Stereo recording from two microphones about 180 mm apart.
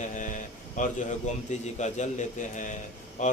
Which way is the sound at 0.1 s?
45° left (ahead or behind).